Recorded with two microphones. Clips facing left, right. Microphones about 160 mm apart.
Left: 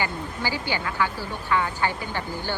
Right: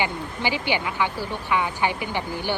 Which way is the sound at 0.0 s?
15° right (ahead or behind).